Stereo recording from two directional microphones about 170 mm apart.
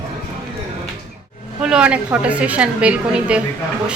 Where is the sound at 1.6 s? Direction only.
5° right (ahead or behind).